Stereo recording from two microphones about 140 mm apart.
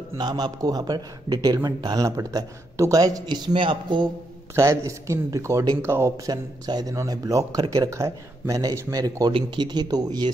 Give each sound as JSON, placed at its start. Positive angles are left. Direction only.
{"t": 0.2, "sound": "a man's voice", "side_deg": -30}
{"t": 4.6, "sound": "a man's voice", "side_deg": -20}